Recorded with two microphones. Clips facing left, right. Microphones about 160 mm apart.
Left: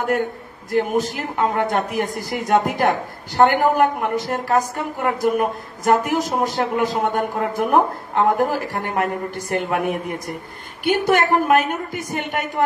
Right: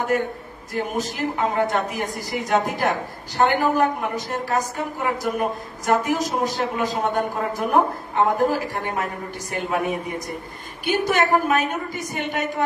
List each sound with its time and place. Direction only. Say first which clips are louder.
0.7 s a man's voice: left 6 dB; 60° left (ahead or behind)